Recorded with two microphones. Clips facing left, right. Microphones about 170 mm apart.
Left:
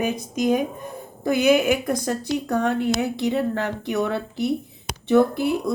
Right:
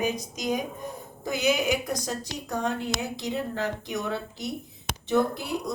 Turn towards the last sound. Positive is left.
turn(degrees=60)  # may be behind; listen again after turning